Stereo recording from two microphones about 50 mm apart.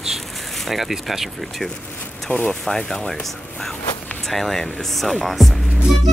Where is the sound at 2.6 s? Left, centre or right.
Centre.